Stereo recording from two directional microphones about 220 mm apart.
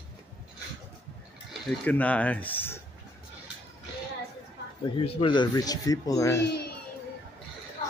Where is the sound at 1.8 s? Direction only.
5° left (ahead or behind).